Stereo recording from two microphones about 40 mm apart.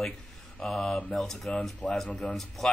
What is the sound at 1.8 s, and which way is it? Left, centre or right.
Speech, left.